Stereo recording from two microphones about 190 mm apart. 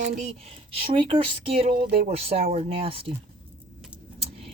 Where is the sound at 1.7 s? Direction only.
50° right (ahead or behind).